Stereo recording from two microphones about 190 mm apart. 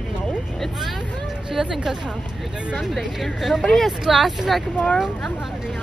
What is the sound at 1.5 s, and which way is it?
Speech, centre (ahead or behind).